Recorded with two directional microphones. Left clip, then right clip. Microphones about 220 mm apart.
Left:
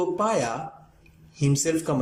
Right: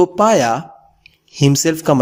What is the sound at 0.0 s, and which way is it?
Speech, 45° right (ahead or behind).